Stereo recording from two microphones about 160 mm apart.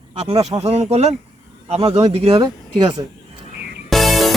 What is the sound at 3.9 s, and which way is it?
Music, centre (ahead or behind).